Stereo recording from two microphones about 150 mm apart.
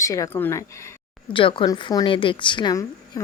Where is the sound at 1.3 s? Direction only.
35° left (ahead or behind).